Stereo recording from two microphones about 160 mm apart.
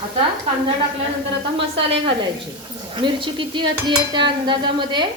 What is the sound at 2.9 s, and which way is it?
Speech, 30° right (ahead or behind).